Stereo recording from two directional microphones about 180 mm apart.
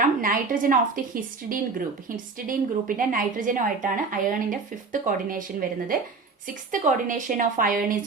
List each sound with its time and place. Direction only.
0.0 s a woman's voice: 50° right (ahead or behind)
6.7 s a woman's voice: 45° right (ahead or behind)